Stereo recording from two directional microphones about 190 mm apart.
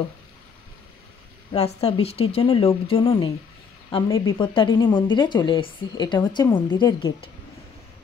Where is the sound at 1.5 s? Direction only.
35° left (ahead or behind).